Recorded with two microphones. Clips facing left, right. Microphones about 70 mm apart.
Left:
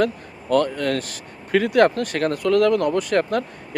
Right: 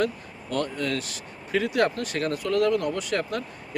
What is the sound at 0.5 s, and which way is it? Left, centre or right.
Speech, left.